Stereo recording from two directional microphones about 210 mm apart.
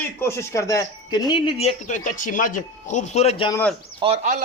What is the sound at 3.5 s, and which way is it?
Speech, 10° left (ahead or behind).